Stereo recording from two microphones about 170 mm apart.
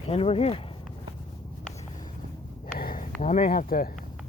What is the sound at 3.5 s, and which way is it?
Speech, 60° left (ahead or behind).